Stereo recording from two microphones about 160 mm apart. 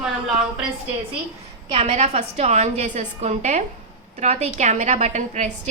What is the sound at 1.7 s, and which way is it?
A woman's voice, 35° right (ahead or behind).